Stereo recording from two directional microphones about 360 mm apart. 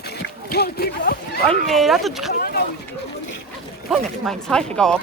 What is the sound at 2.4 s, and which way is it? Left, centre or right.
Speech, left.